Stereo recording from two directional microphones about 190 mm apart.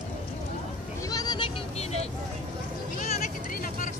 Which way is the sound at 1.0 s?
20° left (ahead or behind).